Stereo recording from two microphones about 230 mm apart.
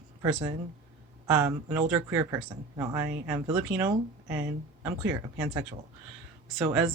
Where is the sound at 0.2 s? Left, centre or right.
Centre.